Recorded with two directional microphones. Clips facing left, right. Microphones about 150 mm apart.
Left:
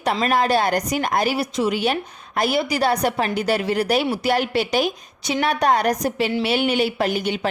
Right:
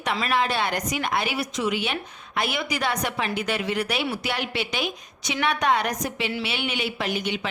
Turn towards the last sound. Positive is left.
turn(degrees=40)  # may be behind; listen again after turning